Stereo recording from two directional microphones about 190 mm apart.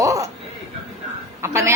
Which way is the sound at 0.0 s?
15° right (ahead or behind).